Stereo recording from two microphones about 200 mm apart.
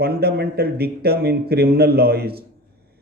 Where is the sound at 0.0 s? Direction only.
50° right (ahead or behind).